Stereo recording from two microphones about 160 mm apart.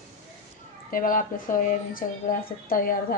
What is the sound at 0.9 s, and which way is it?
A woman's voice, 60° left (ahead or behind).